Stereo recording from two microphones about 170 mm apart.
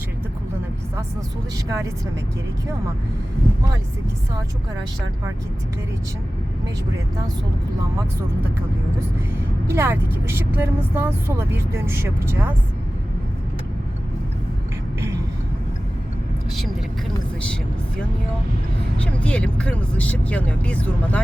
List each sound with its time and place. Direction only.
1.6 s speech: 15° right (ahead or behind)
9.6 s speech: 15° right (ahead or behind)
19.2 s speech: 5° left (ahead or behind)